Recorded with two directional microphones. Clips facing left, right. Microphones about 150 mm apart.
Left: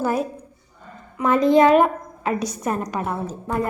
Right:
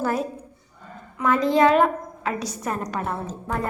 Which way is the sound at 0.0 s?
15° left (ahead or behind).